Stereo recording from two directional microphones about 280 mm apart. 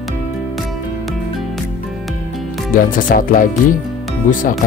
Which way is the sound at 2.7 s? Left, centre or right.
Left.